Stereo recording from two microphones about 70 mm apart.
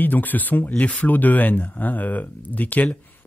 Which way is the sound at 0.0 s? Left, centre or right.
Left.